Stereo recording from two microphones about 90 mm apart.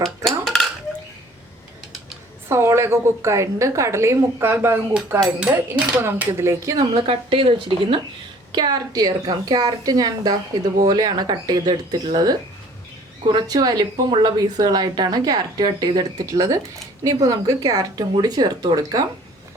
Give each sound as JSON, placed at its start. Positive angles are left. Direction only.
{"t": 0.3, "sound": "dishes", "side_deg": 5}
{"t": 2.5, "sound": "a woman's voice", "side_deg": -30}
{"t": 6.9, "sound": "a woman's voice", "side_deg": -80}
{"t": 8.5, "sound": "a woman's voice", "side_deg": -50}